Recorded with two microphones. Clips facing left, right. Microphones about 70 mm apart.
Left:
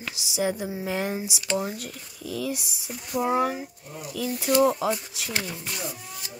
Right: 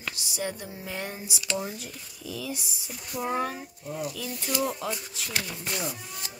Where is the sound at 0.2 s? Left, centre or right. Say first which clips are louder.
Left 2 dB; left.